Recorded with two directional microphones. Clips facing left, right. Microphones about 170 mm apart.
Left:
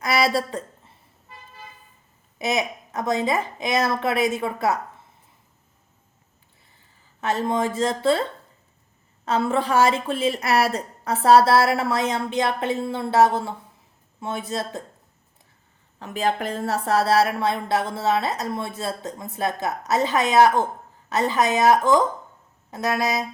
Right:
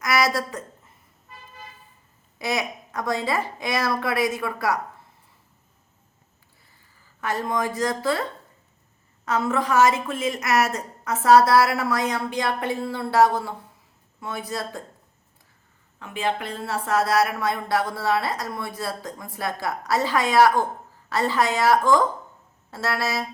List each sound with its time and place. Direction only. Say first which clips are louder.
0.0 s a sound: left 1 dB; 30° left (ahead or behind)
2.4 s speech: left 2 dB; 20° left (ahead or behind)
7.2 s speech: left 3 dB; 25° left (ahead or behind)
9.2 s speech: left 2 dB; 30° left (ahead or behind)
16.0 s speech: left 3 dB; 40° left (ahead or behind); by 23.2 s 15° left (ahead or behind)